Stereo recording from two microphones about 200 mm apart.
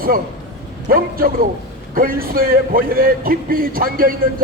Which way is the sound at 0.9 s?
45° right (ahead or behind).